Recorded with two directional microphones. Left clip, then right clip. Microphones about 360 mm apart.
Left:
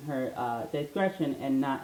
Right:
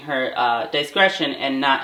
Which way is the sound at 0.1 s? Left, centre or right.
Centre.